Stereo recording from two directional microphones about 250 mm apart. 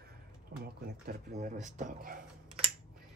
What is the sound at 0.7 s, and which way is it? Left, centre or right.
Speech, right.